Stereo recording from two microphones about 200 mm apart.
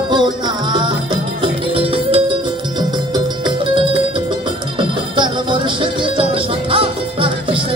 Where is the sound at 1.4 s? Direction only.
25° right (ahead or behind).